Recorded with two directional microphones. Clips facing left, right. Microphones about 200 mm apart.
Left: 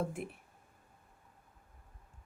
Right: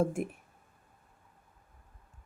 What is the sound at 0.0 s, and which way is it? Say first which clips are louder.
Speech: right 7 dB; 45° right (ahead or behind).